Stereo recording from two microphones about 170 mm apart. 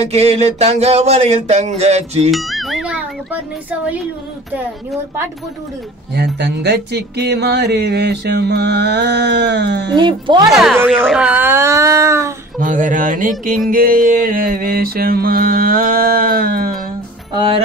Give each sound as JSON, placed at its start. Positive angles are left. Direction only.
{"t": 0.0, "sound": "speech", "side_deg": -40}
{"t": 2.3, "sound": "speech", "side_deg": 0}
{"t": 6.1, "sound": "music", "side_deg": -85}
{"t": 9.9, "sound": "speech", "side_deg": -25}
{"t": 10.5, "sound": "speech", "side_deg": 0}
{"t": 12.5, "sound": "mantra", "side_deg": -50}
{"t": 17.3, "sound": "speech", "side_deg": -25}